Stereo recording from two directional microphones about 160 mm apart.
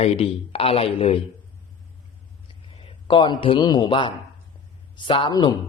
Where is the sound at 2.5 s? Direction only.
30° left (ahead or behind).